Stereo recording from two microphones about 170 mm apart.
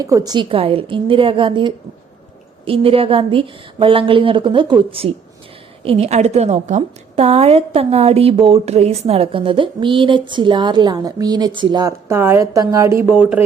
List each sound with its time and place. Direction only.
0.0 s a woman's voice: 20° right (ahead or behind)